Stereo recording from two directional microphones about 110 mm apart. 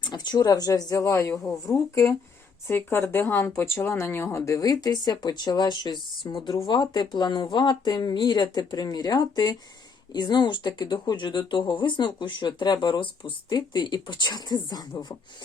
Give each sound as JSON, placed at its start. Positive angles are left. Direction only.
{"t": 0.0, "sound": "speech", "side_deg": 40}